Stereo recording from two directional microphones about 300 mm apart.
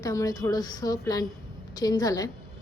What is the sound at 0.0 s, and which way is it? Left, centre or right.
A woman's voice, centre.